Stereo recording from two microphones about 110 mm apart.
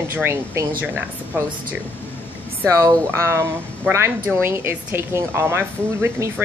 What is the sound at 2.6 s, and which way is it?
A woman's voice, 30° right (ahead or behind).